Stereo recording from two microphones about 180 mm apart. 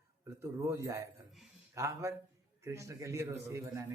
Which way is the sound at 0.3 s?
15° right (ahead or behind).